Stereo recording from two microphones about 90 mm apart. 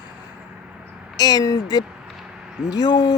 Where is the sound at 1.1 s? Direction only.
45° left (ahead or behind).